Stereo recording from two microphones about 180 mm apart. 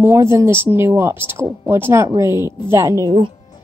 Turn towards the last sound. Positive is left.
turn(degrees=-20)  # may be behind; listen again after turning